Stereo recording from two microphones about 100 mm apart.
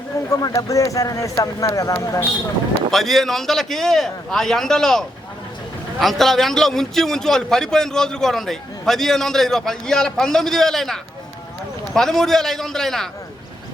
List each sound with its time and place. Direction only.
0.3 s speech: 35° left (ahead or behind)
2.9 s a man's voice: centre (ahead or behind)